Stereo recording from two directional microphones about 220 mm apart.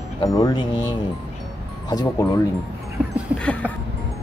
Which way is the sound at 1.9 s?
20° left (ahead or behind).